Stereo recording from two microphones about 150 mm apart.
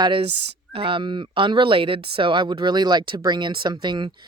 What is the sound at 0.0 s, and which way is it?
Speech, 40° right (ahead or behind).